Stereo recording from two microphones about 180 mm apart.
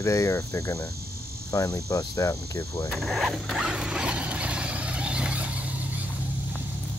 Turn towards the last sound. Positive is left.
turn(degrees=-10)  # may be behind; listen again after turning